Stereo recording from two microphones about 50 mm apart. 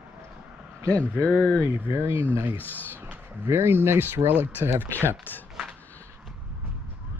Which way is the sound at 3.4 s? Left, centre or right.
Right.